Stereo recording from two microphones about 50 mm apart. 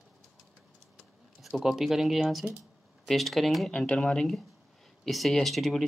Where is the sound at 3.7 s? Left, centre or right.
Centre.